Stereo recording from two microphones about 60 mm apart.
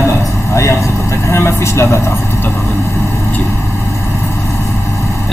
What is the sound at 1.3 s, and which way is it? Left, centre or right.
Speech, left.